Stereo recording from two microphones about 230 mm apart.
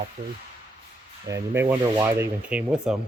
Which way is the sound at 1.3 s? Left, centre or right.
Centre.